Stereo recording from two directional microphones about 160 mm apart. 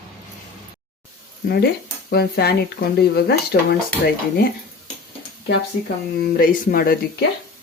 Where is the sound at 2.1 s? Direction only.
85° left.